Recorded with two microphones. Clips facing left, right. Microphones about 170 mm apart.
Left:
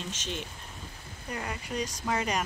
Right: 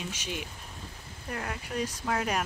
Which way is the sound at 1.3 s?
Centre (ahead or behind).